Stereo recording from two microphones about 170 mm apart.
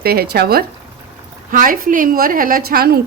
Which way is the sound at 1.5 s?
55° right (ahead or behind).